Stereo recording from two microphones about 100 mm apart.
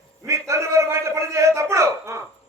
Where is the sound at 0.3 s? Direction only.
30° right (ahead or behind).